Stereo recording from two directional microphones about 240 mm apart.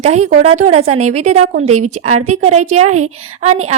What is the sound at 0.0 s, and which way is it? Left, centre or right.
A woman's voice, right.